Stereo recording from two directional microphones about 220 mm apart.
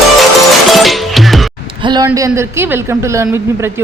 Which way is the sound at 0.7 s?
Centre (ahead or behind).